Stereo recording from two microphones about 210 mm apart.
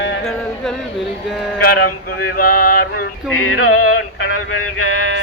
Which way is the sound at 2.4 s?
45° left (ahead or behind).